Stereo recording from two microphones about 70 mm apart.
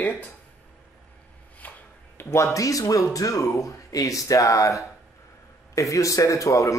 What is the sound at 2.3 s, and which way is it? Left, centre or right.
Speech, left.